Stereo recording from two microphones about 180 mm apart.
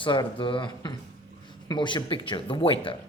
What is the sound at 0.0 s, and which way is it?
Speech, 30° left (ahead or behind).